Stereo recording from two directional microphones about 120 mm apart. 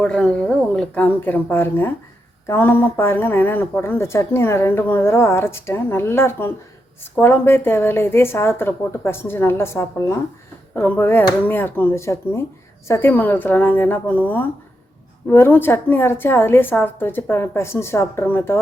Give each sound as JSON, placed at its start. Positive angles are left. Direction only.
{"t": 0.0, "sound": "a woman's voice", "side_deg": 5}